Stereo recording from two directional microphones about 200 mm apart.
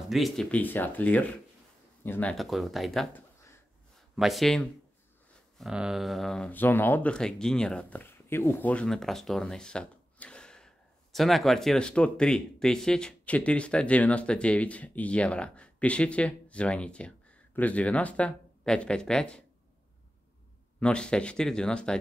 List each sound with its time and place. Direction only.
0.1 s speech: centre (ahead or behind)
20.8 s speech: 5° left (ahead or behind)